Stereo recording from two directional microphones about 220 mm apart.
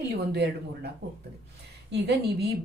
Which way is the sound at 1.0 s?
45° right (ahead or behind).